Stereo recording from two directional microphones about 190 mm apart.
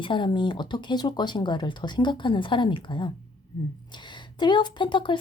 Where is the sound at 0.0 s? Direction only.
25° left (ahead or behind).